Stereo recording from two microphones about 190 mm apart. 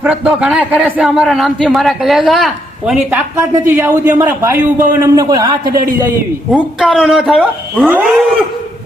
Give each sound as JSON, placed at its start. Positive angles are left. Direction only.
{"t": 0.0, "sound": "a man's voice", "side_deg": -5}
{"t": 6.5, "sound": "a man's voice", "side_deg": 0}